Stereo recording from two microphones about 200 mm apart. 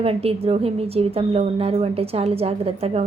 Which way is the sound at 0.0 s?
30° right (ahead or behind).